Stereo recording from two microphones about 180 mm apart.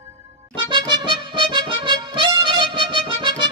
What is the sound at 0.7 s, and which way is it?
Music, 25° right (ahead or behind).